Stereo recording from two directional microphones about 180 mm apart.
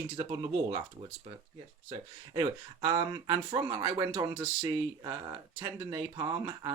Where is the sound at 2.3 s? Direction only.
20° right (ahead or behind).